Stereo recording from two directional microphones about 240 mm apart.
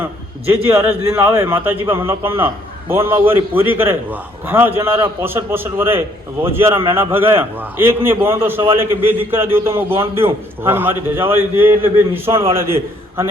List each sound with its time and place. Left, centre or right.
0.7 s a man's voice: centre
12.3 s a man's voice: right
12.5 s a man's voice: centre